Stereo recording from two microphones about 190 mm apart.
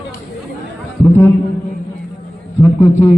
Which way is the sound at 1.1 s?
15° left (ahead or behind).